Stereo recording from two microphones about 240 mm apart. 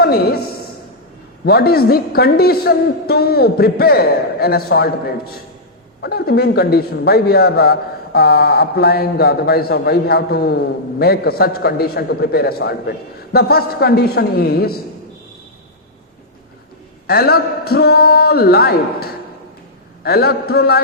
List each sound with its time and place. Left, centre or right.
0.0 s a woman's voice: left
1.5 s a man's voice: left
17.1 s a man's voice: left